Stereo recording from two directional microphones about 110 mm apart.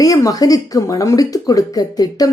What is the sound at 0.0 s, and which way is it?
Speech, 30° left (ahead or behind).